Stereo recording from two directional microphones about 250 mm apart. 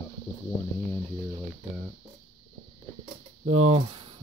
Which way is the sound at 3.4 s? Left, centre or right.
Right.